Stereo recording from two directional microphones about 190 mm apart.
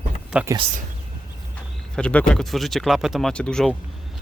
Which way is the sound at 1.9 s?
5° left (ahead or behind).